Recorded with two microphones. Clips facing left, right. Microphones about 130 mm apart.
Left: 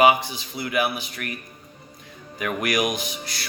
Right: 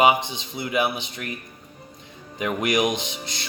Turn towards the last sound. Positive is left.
turn(degrees=-25)  # may be behind; listen again after turning